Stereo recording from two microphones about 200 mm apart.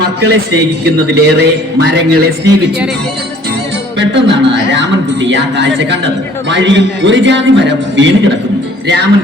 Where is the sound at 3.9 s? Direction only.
60° right (ahead or behind).